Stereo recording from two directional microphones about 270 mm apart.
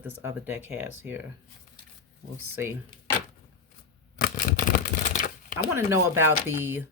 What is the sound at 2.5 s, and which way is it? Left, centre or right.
Speech, centre.